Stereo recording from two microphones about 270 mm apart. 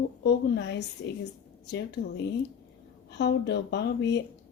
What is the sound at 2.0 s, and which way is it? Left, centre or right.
Speech, left.